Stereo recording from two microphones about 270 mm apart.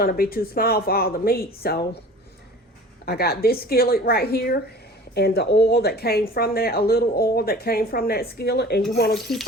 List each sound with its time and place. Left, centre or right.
0.0 s speech: left
3.1 s speech: left
9.3 s speech: centre